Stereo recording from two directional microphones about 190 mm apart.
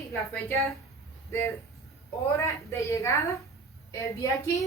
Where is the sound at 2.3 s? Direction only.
15° left (ahead or behind).